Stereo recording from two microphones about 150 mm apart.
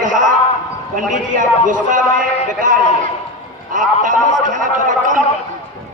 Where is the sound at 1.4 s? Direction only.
60° right (ahead or behind).